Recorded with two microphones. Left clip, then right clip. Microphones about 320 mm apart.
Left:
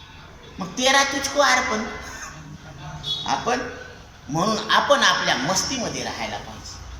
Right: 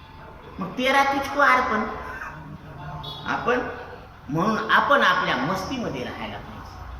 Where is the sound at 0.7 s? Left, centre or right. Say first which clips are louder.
Left 1 dB; centre.